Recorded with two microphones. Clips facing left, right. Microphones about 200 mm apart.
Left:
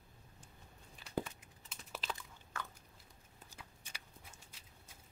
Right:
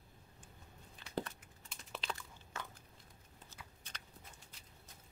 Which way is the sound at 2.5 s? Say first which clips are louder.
Left 1 dB; 20° right (ahead or behind).